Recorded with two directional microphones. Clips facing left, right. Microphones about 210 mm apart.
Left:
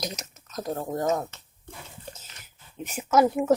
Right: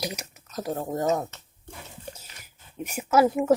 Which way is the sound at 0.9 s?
15° right (ahead or behind).